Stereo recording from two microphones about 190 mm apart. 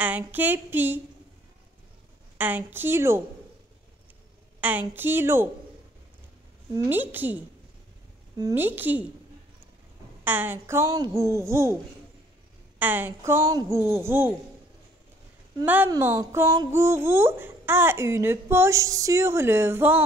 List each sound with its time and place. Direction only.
0.0 s speech: 10° right (ahead or behind)
2.3 s speech: 10° right (ahead or behind)
4.6 s speech: 10° right (ahead or behind)
6.7 s speech: 10° right (ahead or behind)
10.2 s speech: 10° right (ahead or behind)
15.6 s speech: 10° right (ahead or behind)